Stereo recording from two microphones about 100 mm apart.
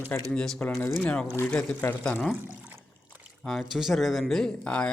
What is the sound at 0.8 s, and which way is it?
Speech, 25° left (ahead or behind).